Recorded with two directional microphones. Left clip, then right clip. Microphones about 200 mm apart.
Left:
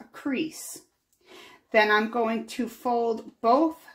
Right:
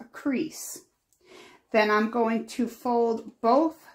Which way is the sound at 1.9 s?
20° right (ahead or behind).